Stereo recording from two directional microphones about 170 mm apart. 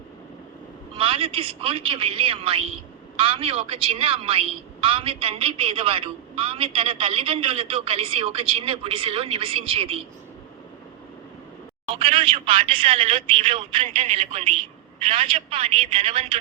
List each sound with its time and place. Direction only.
0.9 s a woman's voice: 35° right (ahead or behind)
11.9 s a woman's voice: 30° right (ahead or behind)